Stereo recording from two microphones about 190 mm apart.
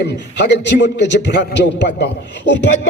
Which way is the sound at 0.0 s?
60° left (ahead or behind).